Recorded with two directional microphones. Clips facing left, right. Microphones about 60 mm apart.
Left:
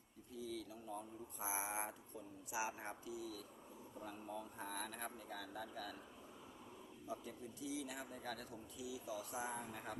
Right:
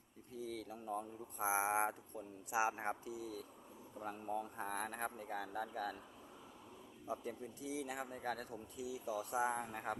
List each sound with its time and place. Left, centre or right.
0.3 s speech: right
7.1 s speech: right